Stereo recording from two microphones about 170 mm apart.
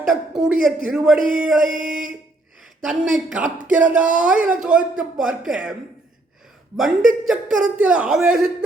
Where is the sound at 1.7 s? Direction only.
50° right (ahead or behind).